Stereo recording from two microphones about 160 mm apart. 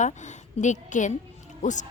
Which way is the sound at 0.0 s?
50° left (ahead or behind).